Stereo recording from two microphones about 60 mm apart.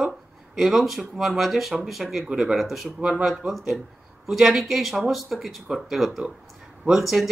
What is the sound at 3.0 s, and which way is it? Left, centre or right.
Speech, centre.